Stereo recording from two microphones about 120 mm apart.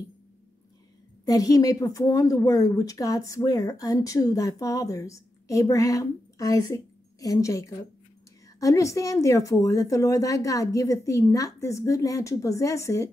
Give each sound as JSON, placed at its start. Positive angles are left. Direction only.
{"t": 1.2, "sound": "a woman's voice", "side_deg": 30}